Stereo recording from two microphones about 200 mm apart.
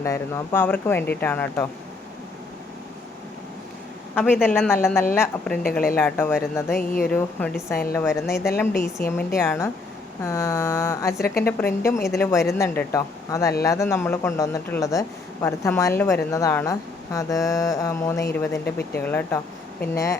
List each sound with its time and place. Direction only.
0.0 s speech: 15° left (ahead or behind)
4.1 s a man's voice: 10° left (ahead or behind)
4.7 s speech: 15° left (ahead or behind)
6.7 s speech: 45° left (ahead or behind)
7.1 s speech: 5° left (ahead or behind)
18.6 s speech: 50° left (ahead or behind)
19.0 s speech: 10° left (ahead or behind)